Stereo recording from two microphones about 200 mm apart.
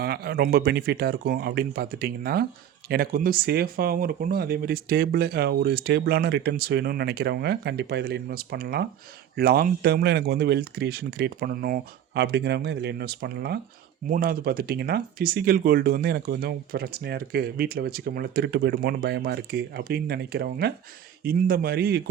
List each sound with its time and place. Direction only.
0.0 s speech: 50° right (ahead or behind)